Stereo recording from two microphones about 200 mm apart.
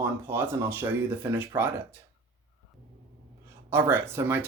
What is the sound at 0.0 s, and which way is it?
Speech, 10° right (ahead or behind).